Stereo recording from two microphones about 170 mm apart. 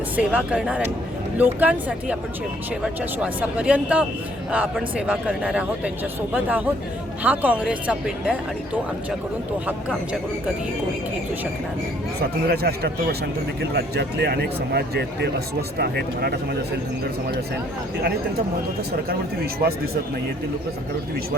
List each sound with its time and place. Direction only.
0.2 s speech: 5° right (ahead or behind)
12.5 s speech: 70° right (ahead or behind)